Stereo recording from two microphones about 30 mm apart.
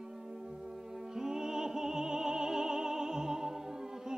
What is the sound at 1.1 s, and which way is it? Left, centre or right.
Music, right.